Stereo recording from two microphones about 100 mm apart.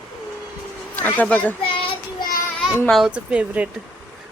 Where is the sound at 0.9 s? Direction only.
15° left (ahead or behind).